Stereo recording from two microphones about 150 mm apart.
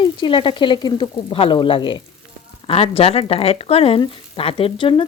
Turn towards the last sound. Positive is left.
turn(degrees=35)  # may be behind; listen again after turning